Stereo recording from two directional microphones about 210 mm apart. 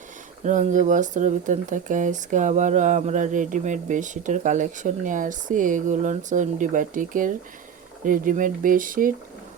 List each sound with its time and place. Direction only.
0.4 s speech: 35° right (ahead or behind)